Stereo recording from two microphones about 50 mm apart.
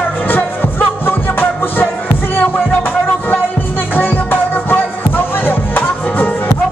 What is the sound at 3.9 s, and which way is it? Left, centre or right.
Music, left.